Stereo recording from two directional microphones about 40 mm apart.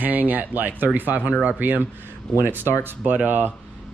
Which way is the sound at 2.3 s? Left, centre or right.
Right.